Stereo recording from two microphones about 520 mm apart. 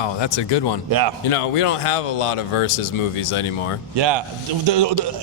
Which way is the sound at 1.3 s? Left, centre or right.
Left.